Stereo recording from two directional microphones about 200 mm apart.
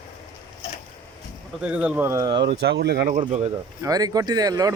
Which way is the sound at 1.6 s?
5° right (ahead or behind).